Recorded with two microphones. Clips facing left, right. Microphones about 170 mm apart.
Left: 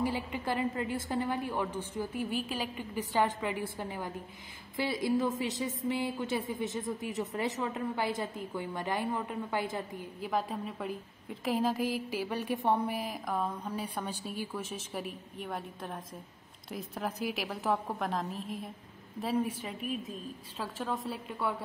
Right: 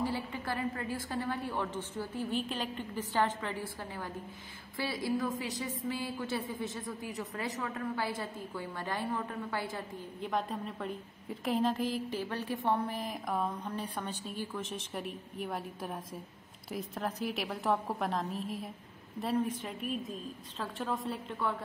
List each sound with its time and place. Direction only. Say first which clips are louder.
0.0 s a woman's voice: left 2 dB; 15° left (ahead or behind)
10.2 s a woman's voice: left 1 dB; 5° left (ahead or behind)